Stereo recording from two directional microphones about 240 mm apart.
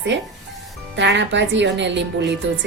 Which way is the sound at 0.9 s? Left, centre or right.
Right.